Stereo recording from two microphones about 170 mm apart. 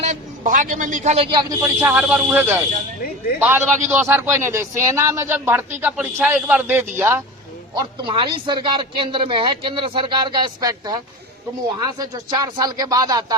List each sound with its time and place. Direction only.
0.0 s a man's voice: 50° right (ahead or behind)
1.3 s a man's voice: 20° right (ahead or behind)
7.8 s speech: 30° right (ahead or behind)